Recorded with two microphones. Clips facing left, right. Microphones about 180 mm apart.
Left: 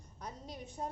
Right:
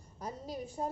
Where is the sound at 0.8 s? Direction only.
15° right (ahead or behind).